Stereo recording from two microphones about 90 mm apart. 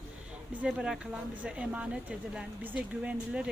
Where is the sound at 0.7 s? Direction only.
10° right (ahead or behind).